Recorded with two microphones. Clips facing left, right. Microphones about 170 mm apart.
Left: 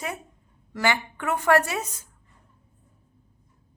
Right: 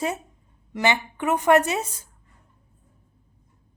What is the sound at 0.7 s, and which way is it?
A woman's voice, 20° right (ahead or behind).